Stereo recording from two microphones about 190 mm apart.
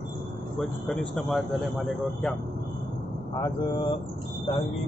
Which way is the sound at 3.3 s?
20° left (ahead or behind).